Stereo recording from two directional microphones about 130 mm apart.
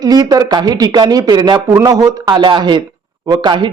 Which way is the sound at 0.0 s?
30° right (ahead or behind).